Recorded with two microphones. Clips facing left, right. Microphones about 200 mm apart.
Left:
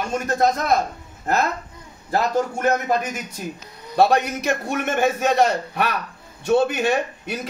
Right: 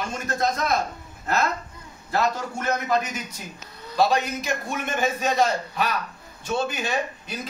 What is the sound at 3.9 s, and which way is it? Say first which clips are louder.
A man's voice: left 4 dB; 60° left (ahead or behind).